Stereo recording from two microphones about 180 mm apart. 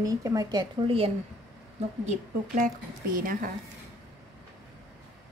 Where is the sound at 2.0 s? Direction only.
40° right (ahead or behind).